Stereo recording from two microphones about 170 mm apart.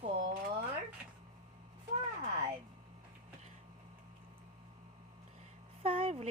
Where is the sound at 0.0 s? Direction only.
35° right (ahead or behind).